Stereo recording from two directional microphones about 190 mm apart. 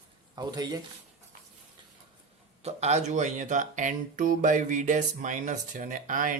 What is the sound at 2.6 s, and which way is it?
Speech, 35° right (ahead or behind).